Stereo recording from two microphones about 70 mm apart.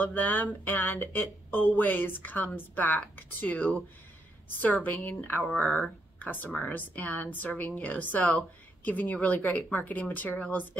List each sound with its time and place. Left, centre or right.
0.0 s a woman's voice: left